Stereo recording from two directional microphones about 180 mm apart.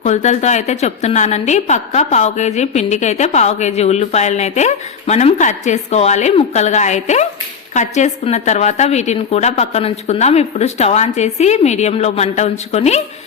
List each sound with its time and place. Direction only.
0.0 s a woman's voice: 40° left (ahead or behind)